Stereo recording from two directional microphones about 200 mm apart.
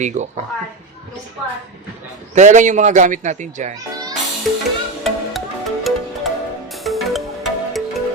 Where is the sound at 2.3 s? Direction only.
35° right (ahead or behind).